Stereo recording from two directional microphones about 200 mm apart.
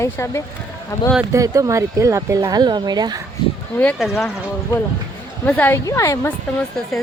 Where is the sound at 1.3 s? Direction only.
15° right (ahead or behind).